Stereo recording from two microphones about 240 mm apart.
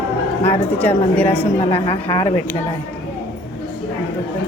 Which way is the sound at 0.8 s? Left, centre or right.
Centre.